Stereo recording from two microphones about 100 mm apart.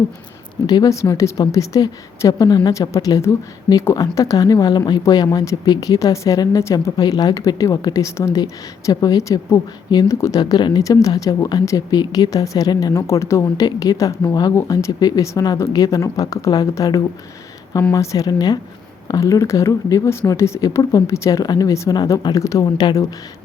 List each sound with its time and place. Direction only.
0.7 s speech: 35° left (ahead or behind)
10.4 s speech: 45° left (ahead or behind)
12.9 s speech: 30° left (ahead or behind)